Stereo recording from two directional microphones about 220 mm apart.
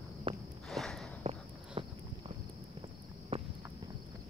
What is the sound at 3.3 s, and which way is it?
Walk, 25° right (ahead or behind).